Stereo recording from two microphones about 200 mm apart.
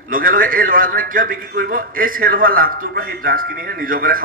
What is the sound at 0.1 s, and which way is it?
A man's voice, 45° right (ahead or behind).